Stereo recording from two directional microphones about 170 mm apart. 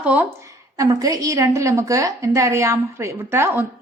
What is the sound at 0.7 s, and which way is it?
Speech, 20° right (ahead or behind).